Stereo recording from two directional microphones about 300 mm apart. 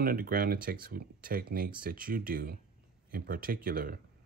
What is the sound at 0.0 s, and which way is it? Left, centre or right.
Speech, right.